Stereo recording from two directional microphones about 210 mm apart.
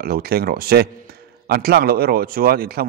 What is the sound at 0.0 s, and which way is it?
A man's voice, 45° right (ahead or behind).